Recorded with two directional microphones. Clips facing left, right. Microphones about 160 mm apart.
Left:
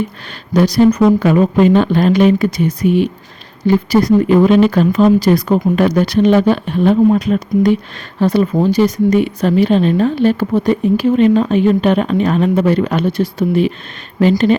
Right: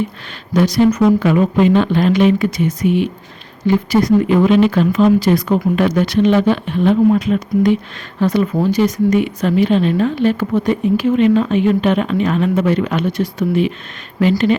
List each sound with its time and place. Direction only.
0.5 s speech: 35° left (ahead or behind)